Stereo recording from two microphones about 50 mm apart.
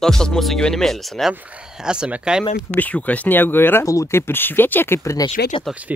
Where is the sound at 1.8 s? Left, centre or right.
Centre.